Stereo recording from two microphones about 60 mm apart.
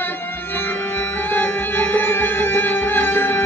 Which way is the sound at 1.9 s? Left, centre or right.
Left.